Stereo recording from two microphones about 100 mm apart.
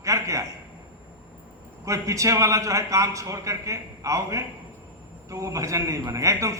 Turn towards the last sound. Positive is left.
turn(degrees=-30)  # may be behind; listen again after turning